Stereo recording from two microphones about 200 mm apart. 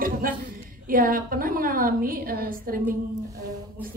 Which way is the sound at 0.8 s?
45° right (ahead or behind).